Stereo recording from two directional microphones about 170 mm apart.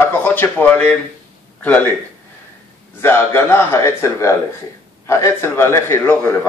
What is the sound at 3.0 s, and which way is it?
A man's voice, 15° left (ahead or behind).